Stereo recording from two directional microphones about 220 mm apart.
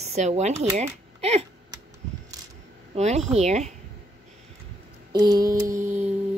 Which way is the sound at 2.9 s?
30° right (ahead or behind).